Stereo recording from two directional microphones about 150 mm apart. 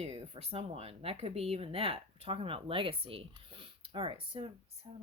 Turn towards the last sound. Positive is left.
turn(degrees=-40)  # may be behind; listen again after turning